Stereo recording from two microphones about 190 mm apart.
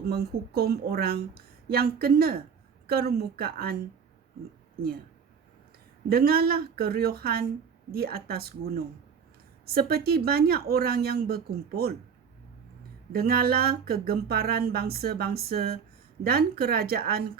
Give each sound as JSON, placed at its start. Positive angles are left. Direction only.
{"t": 0.0, "sound": "speech", "side_deg": -55}
{"t": 6.1, "sound": "speech", "side_deg": -50}
{"t": 13.1, "sound": "speech", "side_deg": -50}